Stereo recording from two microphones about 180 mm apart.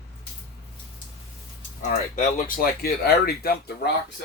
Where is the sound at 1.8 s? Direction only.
40° left (ahead or behind); by 3.9 s 60° left (ahead or behind).